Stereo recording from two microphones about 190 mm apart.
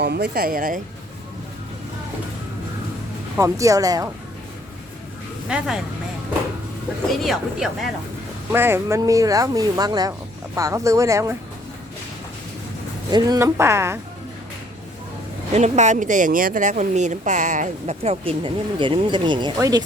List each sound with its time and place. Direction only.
0.0 s speech: 60° right (ahead or behind)
3.3 s speech: 15° right (ahead or behind)
5.5 s speech: 5° right (ahead or behind)
7.2 s speech: centre (ahead or behind)
8.5 s speech: 10° right (ahead or behind)
13.1 s speech: 20° right (ahead or behind)
15.5 s speech: 35° right (ahead or behind); by 19.8 s 20° right (ahead or behind)